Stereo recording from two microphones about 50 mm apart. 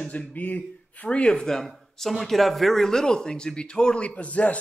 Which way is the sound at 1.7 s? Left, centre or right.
Centre.